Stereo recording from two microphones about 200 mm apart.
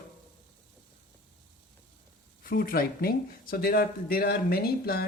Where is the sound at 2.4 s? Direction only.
45° left (ahead or behind).